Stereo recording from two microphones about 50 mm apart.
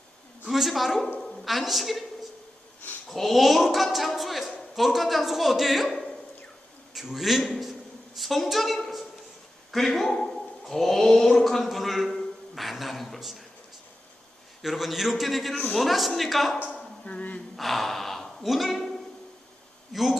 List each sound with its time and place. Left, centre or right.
0.4 s a man's voice: centre
3.1 s a man's voice: centre
14.6 s a man's voice: centre
16.6 s a sound: left
17.6 s gasp: centre
19.9 s a man's voice: centre